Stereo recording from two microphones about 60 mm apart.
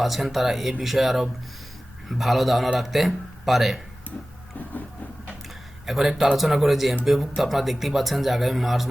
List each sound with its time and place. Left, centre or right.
0.0 s speech: centre
5.8 s speech: centre